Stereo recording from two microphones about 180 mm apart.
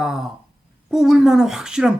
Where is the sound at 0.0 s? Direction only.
5° right (ahead or behind).